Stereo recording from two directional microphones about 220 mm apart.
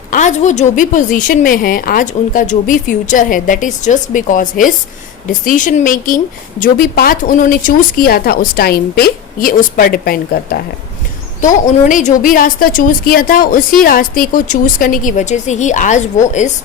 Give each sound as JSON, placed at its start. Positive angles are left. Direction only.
{"t": 0.1, "sound": "a woman's voice", "side_deg": 35}